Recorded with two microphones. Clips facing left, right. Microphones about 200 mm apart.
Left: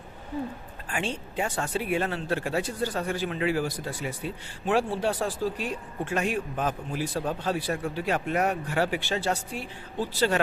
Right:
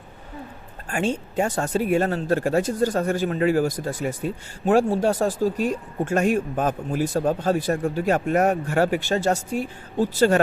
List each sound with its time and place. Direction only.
0.9 s speech: 45° right (ahead or behind)